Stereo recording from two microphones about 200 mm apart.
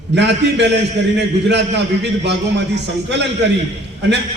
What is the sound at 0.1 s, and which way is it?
A man's voice, 60° right (ahead or behind).